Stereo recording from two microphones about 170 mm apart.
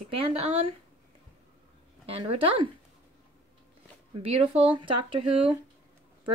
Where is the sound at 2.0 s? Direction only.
35° right (ahead or behind).